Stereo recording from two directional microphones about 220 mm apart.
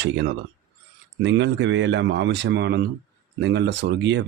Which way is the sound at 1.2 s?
55° right (ahead or behind).